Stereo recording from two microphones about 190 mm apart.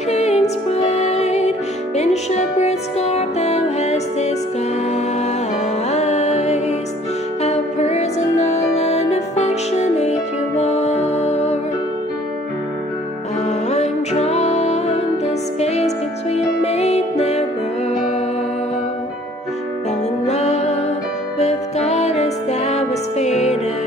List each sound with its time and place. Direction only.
0.1 s music: 35° left (ahead or behind)
5.9 s music: 35° left (ahead or behind)
13.5 s music: 35° left (ahead or behind)
20.2 s music: 35° left (ahead or behind)